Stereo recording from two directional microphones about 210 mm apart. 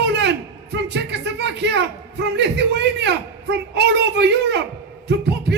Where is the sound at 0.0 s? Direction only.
55° right (ahead or behind).